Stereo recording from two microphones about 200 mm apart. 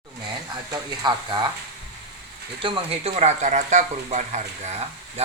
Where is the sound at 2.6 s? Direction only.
30° right (ahead or behind).